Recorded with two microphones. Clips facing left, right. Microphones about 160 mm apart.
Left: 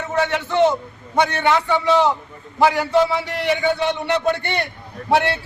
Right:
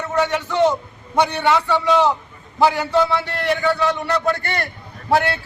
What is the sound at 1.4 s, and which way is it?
A man's voice, centre (ahead or behind).